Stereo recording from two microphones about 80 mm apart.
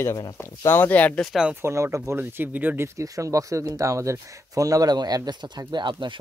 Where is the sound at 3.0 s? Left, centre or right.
Right.